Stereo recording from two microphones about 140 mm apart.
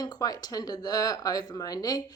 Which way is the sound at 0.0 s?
30° left (ahead or behind).